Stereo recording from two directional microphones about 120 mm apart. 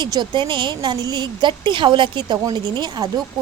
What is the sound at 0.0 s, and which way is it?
A woman's voice, 40° right (ahead or behind).